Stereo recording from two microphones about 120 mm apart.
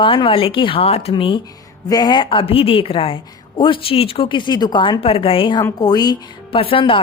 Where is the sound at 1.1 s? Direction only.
45° left (ahead or behind).